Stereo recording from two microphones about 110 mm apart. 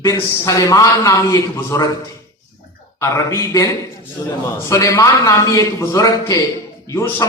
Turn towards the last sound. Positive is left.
turn(degrees=25)  # may be behind; listen again after turning